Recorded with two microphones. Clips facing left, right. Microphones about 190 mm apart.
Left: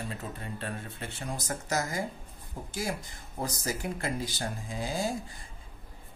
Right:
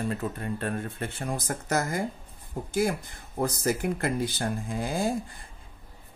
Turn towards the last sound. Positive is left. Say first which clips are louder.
# right 4 dB
turn(degrees=-55)  # may be behind; listen again after turning